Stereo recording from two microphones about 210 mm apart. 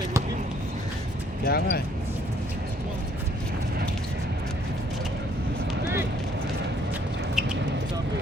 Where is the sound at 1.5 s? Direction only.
50° left (ahead or behind).